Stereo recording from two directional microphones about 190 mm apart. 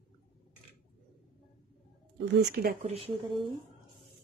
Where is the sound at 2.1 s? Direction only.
60° right (ahead or behind).